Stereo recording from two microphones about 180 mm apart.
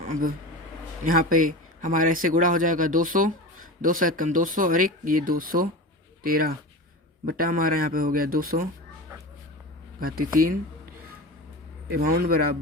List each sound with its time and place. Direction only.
0.0 s speech: 50° right (ahead or behind)
10.0 s speech: 55° right (ahead or behind)
11.9 s speech: 55° right (ahead or behind)